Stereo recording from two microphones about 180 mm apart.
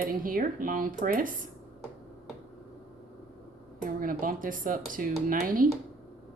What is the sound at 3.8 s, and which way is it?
Speech, 50° right (ahead or behind).